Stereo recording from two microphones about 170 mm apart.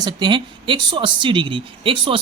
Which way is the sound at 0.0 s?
25° right (ahead or behind).